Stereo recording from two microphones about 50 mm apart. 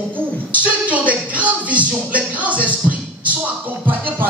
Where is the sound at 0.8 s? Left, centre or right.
Right.